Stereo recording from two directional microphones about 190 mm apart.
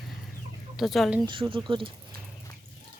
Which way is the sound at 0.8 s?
Centre (ahead or behind).